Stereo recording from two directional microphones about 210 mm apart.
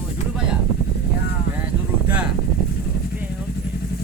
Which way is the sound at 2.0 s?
5° right (ahead or behind).